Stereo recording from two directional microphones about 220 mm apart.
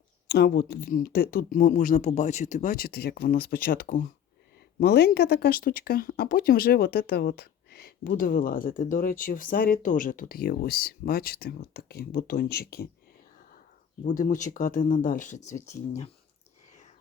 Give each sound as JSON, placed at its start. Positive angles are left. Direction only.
{"t": 0.3, "sound": "speech", "side_deg": 45}
{"t": 14.0, "sound": "speech", "side_deg": 35}